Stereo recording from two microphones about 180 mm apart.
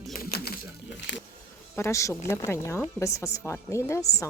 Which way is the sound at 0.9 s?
80° left.